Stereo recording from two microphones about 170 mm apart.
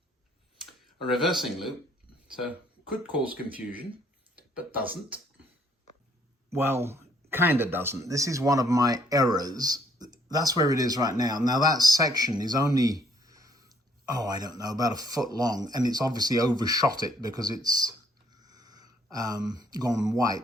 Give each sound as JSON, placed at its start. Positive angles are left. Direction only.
{"t": 0.6, "sound": "speech", "side_deg": 0}
{"t": 4.4, "sound": "speech", "side_deg": -10}
{"t": 6.5, "sound": "speech", "side_deg": -15}
{"t": 18.4, "sound": "a sound", "side_deg": -20}
{"t": 19.1, "sound": "speech", "side_deg": -20}